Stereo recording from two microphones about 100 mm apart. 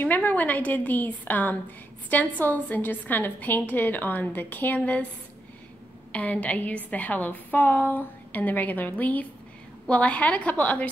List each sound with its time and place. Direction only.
0.0 s a woman's voice: 15° left (ahead or behind)
6.1 s a woman's voice: 15° left (ahead or behind)